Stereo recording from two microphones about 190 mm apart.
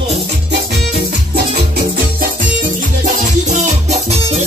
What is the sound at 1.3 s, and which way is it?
Music, 50° right (ahead or behind).